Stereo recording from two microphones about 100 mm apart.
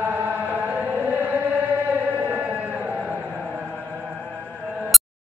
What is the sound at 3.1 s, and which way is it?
Train, 15° right (ahead or behind).